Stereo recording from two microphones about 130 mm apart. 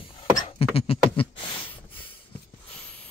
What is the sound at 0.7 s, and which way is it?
Beatboxing, 50° left (ahead or behind).